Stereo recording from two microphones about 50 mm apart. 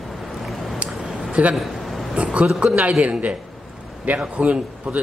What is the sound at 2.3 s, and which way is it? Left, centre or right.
A man's voice, right.